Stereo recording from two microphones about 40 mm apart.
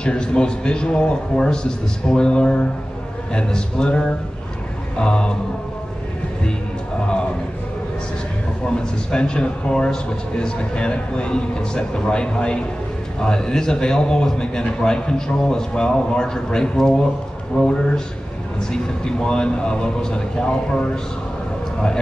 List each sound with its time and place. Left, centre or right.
0.0 s a man's voice: left
8.6 s a man's voice: left